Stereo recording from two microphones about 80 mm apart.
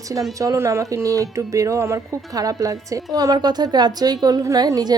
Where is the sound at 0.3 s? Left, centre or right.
Right.